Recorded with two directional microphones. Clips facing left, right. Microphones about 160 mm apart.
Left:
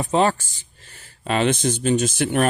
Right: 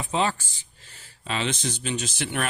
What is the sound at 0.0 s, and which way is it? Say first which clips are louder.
Speech: left 7 dB; 50° left (ahead or behind).